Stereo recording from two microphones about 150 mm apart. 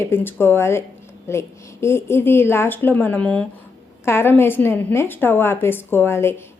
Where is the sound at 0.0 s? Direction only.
15° left (ahead or behind).